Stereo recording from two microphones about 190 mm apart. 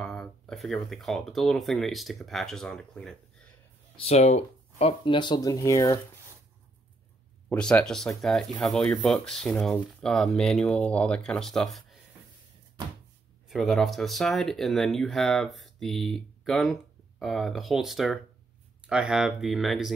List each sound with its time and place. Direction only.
0.0 s speech: centre (ahead or behind)
3.9 s speech: 30° left (ahead or behind)
7.4 s speech: 5° left (ahead or behind)
13.5 s speech: centre (ahead or behind)